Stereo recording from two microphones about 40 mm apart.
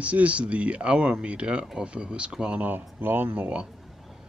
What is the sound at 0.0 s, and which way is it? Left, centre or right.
Speech, right.